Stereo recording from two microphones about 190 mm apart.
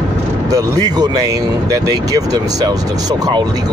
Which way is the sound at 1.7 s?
20° right (ahead or behind).